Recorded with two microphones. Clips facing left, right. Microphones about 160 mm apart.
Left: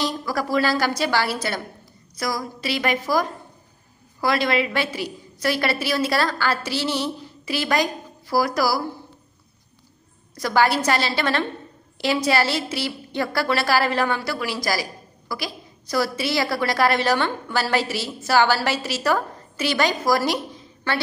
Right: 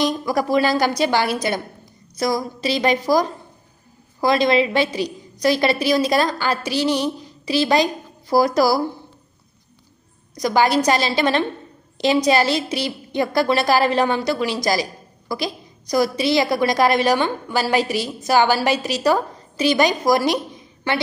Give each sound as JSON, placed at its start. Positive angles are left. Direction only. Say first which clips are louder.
{"t": 0.0, "sound": "a woman's voice", "louder": "right 5 dB", "side_deg": -20}
{"t": 4.2, "sound": "a woman's voice", "louder": "right 5 dB", "side_deg": -20}
{"t": 7.7, "sound": "a woman's voice", "louder": "right 4 dB", "side_deg": -25}
{"t": 10.3, "sound": "a woman's voice", "louder": "right 3 dB", "side_deg": -15}